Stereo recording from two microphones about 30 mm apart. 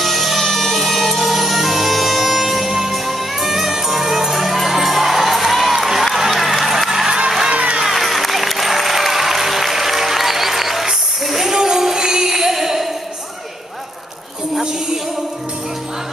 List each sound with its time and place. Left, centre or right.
0.0 s music: centre
6.1 s a sound: centre
7.2 s music: centre
7.9 s applause: centre
11.2 s music: centre